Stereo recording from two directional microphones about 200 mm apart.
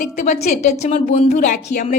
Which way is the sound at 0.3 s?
35° left (ahead or behind).